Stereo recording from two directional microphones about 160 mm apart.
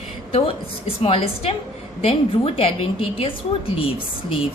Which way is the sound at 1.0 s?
35° left (ahead or behind).